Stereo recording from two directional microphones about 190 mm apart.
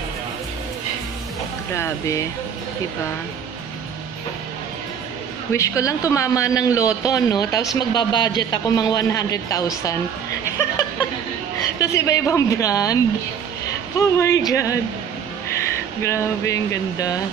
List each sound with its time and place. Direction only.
1.8 s speech: 15° left (ahead or behind)
5.5 s a man's voice: 15° left (ahead or behind)
11.8 s speech: 15° left (ahead or behind)
16.0 s speech: 15° left (ahead or behind)